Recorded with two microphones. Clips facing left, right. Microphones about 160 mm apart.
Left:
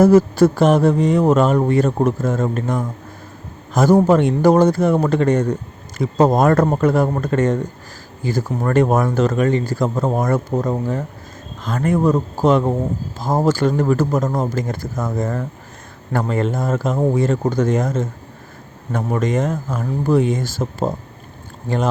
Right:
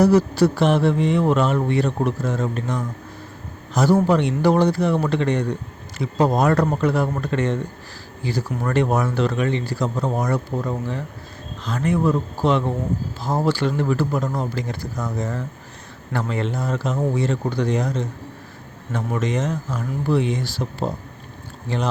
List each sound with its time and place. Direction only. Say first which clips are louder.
0.0 s mantra: left 4 dB; 50° left (ahead or behind)